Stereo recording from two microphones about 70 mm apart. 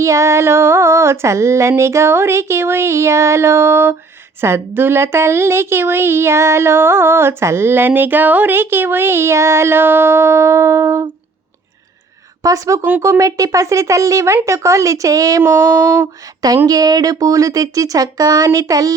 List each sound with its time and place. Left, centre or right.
0.0 s speech: right
12.4 s speech: right
15.4 s speech: right
16.6 s speech: right